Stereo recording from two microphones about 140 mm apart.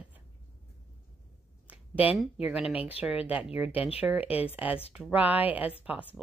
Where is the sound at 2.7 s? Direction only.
45° left (ahead or behind).